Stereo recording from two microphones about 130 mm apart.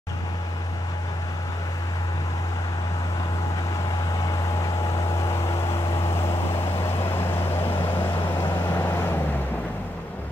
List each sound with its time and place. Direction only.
5.2 s vehicle: 20° left (ahead or behind)